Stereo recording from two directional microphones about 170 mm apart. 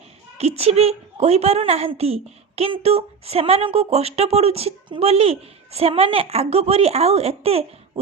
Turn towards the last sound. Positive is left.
turn(degrees=-35)  # may be behind; listen again after turning